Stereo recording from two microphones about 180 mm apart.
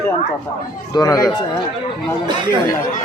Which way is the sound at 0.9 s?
20° left (ahead or behind).